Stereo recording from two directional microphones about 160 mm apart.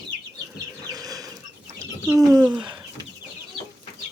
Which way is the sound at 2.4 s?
10° right (ahead or behind).